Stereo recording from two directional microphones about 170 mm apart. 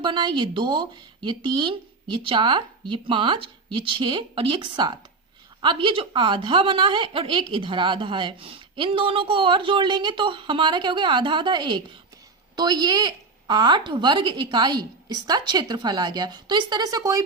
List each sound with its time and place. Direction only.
0.0 s a woman's voice: 25° right (ahead or behind)